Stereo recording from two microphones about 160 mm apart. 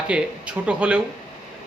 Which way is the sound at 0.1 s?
5° right (ahead or behind).